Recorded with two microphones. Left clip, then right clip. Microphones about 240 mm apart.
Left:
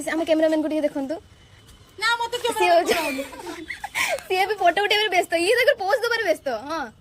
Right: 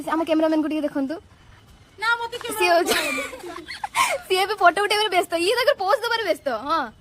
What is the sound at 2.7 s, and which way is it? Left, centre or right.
Speech, right.